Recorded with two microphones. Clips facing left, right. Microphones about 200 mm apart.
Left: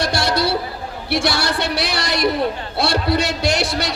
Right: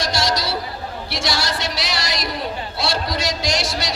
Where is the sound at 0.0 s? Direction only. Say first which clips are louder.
Left 3 dB; 60° left (ahead or behind).